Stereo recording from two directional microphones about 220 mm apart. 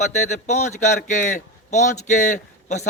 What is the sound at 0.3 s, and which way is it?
A man's voice, 30° left (ahead or behind).